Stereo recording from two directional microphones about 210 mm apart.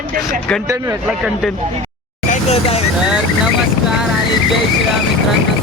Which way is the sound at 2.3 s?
30° left (ahead or behind).